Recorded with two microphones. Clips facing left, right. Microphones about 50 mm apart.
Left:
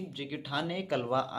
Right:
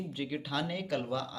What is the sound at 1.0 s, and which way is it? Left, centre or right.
Speech, left.